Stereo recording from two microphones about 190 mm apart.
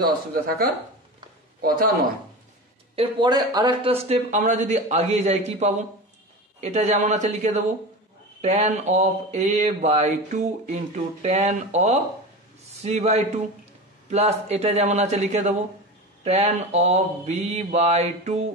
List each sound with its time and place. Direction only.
0.0 s a man's voice: 50° right (ahead or behind)
3.0 s speech: 25° right (ahead or behind)